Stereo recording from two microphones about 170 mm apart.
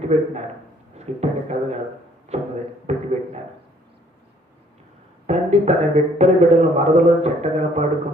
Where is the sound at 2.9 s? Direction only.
40° right (ahead or behind).